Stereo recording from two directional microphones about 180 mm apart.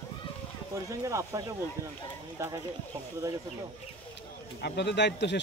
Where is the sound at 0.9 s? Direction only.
15° right (ahead or behind).